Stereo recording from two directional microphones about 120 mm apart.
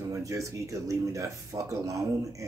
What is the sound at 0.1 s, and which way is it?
Speech, 25° right (ahead or behind).